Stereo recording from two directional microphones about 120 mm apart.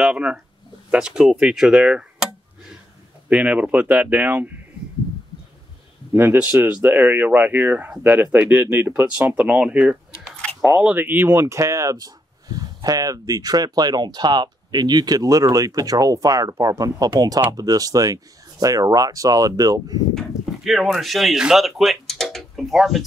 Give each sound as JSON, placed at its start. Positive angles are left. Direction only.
{"t": 0.0, "sound": "speech", "side_deg": -10}
{"t": 3.3, "sound": "speech", "side_deg": -10}
{"t": 6.1, "sound": "speech", "side_deg": -15}
{"t": 20.2, "sound": "speech", "side_deg": 0}